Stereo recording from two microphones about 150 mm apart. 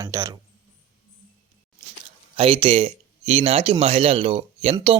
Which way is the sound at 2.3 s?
35° right (ahead or behind).